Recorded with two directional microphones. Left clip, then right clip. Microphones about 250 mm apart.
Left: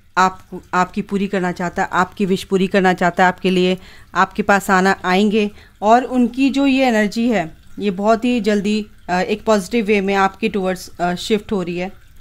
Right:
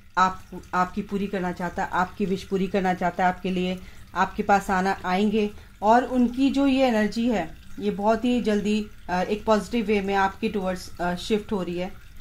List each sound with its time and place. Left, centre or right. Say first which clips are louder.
0.1 s speech: left 6 dB; left